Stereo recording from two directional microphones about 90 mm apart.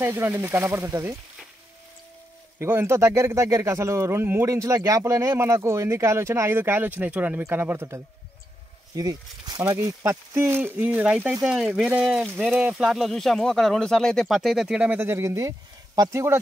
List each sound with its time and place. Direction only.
0.1 s speech: 25° right (ahead or behind)
2.6 s speech: 30° right (ahead or behind)
8.9 s speech: 45° right (ahead or behind)
9.6 s speech: 25° right (ahead or behind); by 14.8 s 5° right (ahead or behind)
14.8 s speech: 25° right (ahead or behind)